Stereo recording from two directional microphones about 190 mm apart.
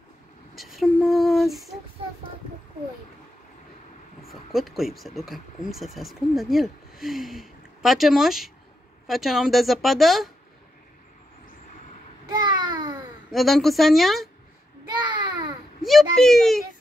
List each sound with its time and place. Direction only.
0.6 s speech: centre (ahead or behind)
4.3 s speech: centre (ahead or behind)
12.3 s babbling: 20° right (ahead or behind)
13.3 s speech: centre (ahead or behind)
15.0 s a sound: 25° right (ahead or behind)
15.8 s speech: centre (ahead or behind)